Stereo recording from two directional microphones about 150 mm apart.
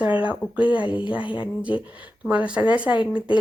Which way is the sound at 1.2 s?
35° left (ahead or behind).